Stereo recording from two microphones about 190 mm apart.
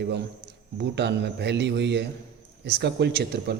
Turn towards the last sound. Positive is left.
turn(degrees=-60)  # may be behind; listen again after turning